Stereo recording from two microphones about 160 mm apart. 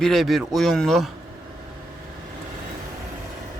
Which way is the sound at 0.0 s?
Centre (ahead or behind).